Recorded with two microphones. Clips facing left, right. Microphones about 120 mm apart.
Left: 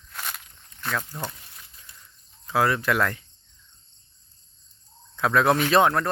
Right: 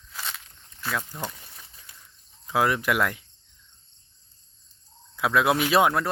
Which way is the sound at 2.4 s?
15° right (ahead or behind).